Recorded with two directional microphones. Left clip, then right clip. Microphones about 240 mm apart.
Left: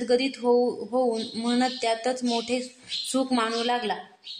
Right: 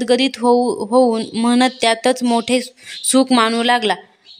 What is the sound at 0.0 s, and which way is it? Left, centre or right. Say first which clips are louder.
Speech: right 8 dB; right.